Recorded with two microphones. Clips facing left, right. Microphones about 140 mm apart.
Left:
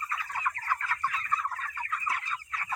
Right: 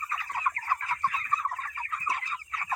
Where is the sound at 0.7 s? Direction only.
25° right (ahead or behind).